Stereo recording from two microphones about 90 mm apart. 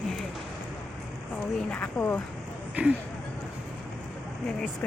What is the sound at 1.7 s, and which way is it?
Speech, 15° left (ahead or behind).